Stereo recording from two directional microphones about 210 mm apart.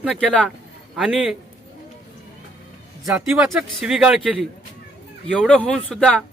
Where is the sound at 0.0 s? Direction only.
Centre (ahead or behind).